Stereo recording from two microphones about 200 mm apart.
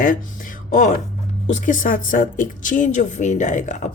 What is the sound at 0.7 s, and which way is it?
A woman's voice, 40° left (ahead or behind).